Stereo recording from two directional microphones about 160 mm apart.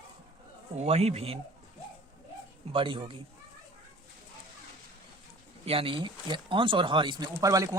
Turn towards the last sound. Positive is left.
turn(degrees=-20)  # may be behind; listen again after turning